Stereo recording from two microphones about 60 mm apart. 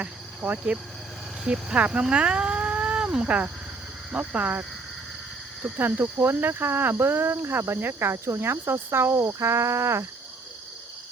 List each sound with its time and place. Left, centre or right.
0.0 s speech: right
5.6 s speech: right
7.8 s cricket: right